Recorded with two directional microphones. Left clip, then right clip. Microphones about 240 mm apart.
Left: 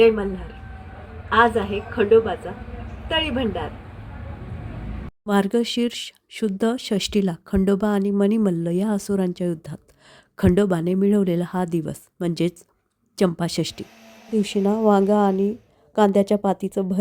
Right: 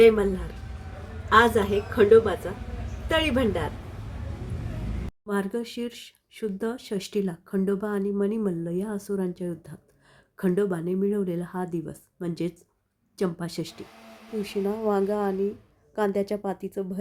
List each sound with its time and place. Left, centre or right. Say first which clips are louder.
1.3 s a woman's voice: left 1 dB; centre
5.2 s speech: left 9 dB; left